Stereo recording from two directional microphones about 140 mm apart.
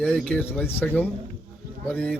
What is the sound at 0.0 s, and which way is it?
Speech, 5° left (ahead or behind).